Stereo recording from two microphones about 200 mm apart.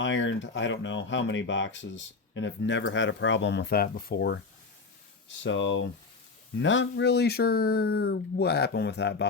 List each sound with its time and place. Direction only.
0.0 s speech: 65° left (ahead or behind)